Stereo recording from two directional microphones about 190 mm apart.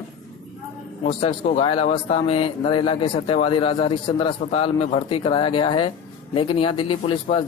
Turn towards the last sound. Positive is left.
turn(degrees=30)  # may be behind; listen again after turning